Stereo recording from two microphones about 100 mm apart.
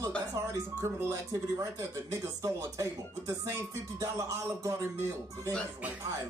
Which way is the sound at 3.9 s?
30° right (ahead or behind).